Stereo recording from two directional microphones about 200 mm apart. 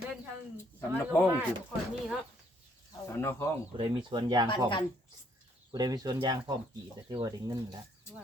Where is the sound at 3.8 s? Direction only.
25° right (ahead or behind).